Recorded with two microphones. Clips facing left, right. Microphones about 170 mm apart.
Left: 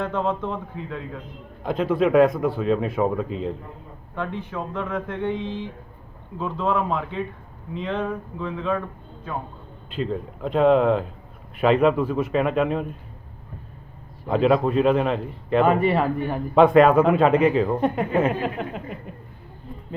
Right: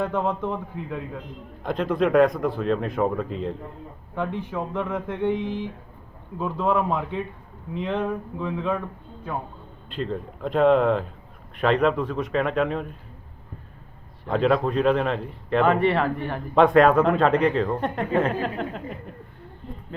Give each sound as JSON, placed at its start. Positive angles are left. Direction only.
{"t": 0.0, "sound": "speech", "side_deg": -15}
{"t": 1.6, "sound": "a man's voice", "side_deg": 0}
{"t": 4.1, "sound": "speech", "side_deg": -15}
{"t": 9.9, "sound": "a man's voice", "side_deg": 0}
{"t": 14.3, "sound": "a man's voice", "side_deg": 5}